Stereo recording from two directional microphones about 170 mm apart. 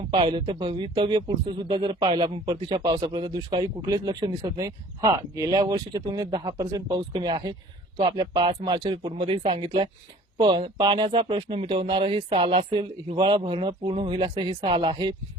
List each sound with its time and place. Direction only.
0.1 s a man's voice: 30° right (ahead or behind)